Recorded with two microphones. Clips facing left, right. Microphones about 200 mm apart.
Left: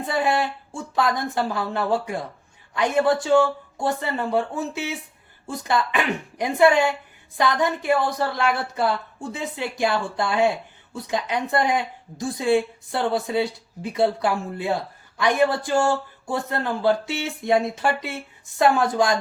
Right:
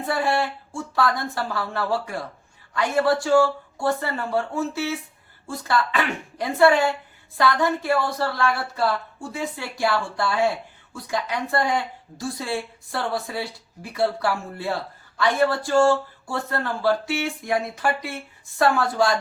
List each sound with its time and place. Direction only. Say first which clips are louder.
0.0 s a woman's voice: left 1 dB; 20° left (ahead or behind)